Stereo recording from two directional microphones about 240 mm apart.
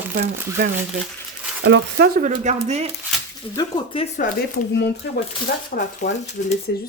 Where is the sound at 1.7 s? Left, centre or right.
Right.